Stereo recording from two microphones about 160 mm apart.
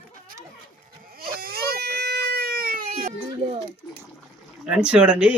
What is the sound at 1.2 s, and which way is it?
Baby cry, 70° right (ahead or behind).